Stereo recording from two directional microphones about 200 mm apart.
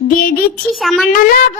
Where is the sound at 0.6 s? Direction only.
Centre (ahead or behind).